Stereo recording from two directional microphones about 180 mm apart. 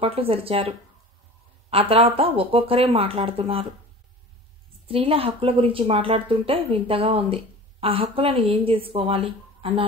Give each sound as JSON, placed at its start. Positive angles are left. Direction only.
{"t": 0.0, "sound": "speech", "side_deg": -30}
{"t": 4.8, "sound": "speech", "side_deg": -30}